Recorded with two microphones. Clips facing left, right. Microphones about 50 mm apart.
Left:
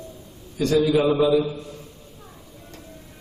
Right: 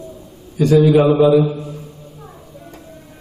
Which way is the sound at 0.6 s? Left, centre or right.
Centre.